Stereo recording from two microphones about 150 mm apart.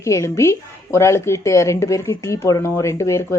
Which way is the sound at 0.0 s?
20° left (ahead or behind).